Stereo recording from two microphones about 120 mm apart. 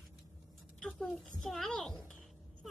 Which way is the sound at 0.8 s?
5° left (ahead or behind).